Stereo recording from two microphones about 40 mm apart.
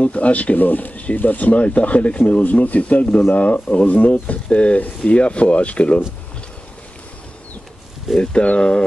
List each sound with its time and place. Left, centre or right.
0.0 s speech: left
8.2 s speech: left